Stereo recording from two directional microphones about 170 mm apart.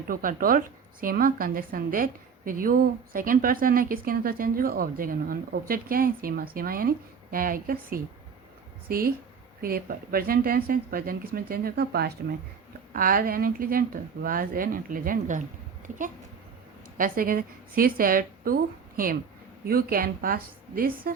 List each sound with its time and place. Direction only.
0.1 s a woman's voice: 55° right (ahead or behind)
12.9 s a woman's voice: 55° right (ahead or behind)
17.0 s a woman's voice: 55° right (ahead or behind)